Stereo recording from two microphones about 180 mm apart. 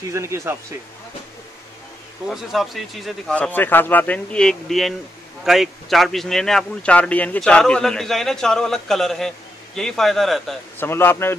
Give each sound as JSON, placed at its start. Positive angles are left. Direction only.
{"t": 0.1, "sound": "speech", "side_deg": -15}
{"t": 2.2, "sound": "speech", "side_deg": 0}
{"t": 10.8, "sound": "a man's voice", "side_deg": 10}